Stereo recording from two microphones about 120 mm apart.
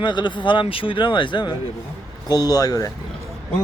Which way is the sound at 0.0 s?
40° left (ahead or behind).